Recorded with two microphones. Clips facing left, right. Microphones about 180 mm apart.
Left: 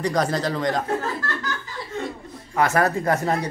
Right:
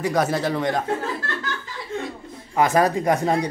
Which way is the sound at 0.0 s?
5° right (ahead or behind).